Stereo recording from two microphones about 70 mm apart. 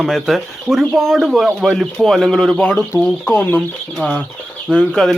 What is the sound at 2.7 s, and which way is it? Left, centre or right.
Speech, left.